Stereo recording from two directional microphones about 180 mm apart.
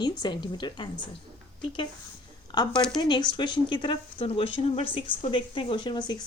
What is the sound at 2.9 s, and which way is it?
Speech, 25° left (ahead or behind).